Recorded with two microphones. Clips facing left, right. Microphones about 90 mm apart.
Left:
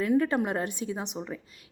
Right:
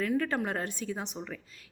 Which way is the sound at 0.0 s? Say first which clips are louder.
Left 5 dB; 15° left (ahead or behind).